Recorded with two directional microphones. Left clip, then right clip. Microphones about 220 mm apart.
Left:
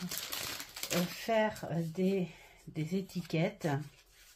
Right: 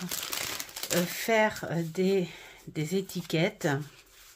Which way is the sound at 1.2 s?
35° right (ahead or behind).